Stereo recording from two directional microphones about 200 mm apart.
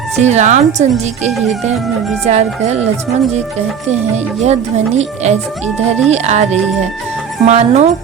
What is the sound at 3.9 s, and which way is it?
A woman's voice, 35° right (ahead or behind).